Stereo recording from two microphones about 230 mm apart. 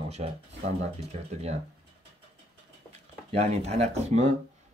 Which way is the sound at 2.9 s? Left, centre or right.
Right.